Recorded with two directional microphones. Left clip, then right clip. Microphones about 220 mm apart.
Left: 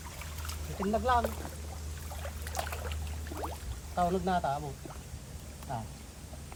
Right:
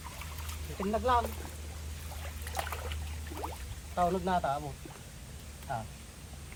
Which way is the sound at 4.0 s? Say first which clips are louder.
Even; 15° right (ahead or behind).